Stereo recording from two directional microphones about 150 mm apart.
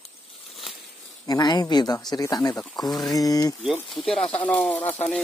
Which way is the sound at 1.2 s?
25° left (ahead or behind).